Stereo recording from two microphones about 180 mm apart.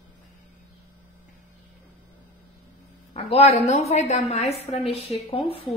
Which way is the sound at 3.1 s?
35° left (ahead or behind).